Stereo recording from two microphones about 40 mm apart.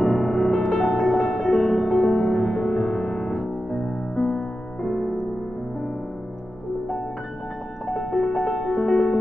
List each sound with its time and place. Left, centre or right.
0.0 s music: centre
8.5 s music: centre